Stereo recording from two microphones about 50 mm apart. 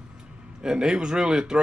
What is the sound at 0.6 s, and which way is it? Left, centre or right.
Speech, centre.